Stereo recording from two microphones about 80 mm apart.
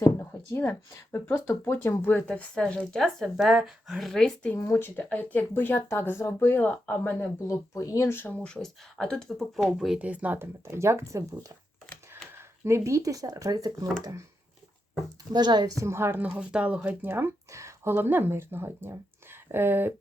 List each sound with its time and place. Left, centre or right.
0.0 s speech: left; by 4.4 s centre
4.5 s speech: left
4.9 s speech: centre
7.4 s speech: left
8.4 s speech: centre
9.6 s speech: centre
10.0 s speech: centre
10.3 s speech: right
15.3 s a woman's voice: right
15.8 s speech: right
16.2 s speech: centre
17.5 s speech: right